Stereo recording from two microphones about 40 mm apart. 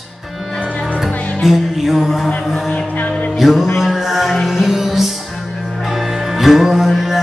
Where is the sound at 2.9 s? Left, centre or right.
Left.